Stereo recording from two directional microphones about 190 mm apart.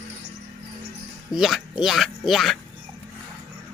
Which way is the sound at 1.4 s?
Centre (ahead or behind).